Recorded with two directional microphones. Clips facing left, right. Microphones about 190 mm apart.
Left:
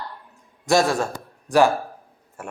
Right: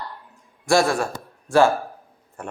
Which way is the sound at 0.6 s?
20° left (ahead or behind).